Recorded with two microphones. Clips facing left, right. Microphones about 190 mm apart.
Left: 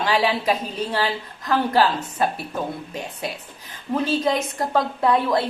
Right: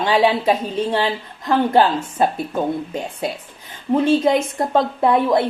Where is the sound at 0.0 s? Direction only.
25° right (ahead or behind).